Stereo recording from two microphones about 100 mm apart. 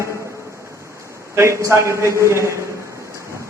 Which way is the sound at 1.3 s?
30° right (ahead or behind).